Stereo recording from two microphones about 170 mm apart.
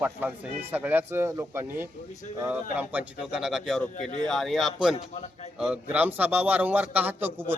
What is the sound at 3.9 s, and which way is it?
Speech, 45° left (ahead or behind).